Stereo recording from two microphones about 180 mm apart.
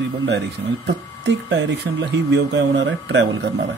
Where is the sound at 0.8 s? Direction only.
80° right.